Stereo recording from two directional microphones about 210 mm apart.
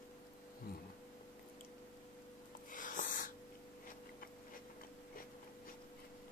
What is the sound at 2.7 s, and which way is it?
Snort, 40° left (ahead or behind).